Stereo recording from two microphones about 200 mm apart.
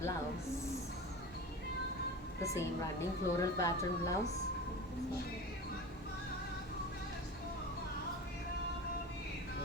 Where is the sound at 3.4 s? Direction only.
15° left (ahead or behind).